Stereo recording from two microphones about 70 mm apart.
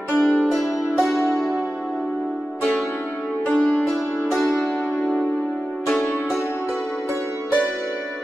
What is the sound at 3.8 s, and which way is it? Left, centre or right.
Music, centre.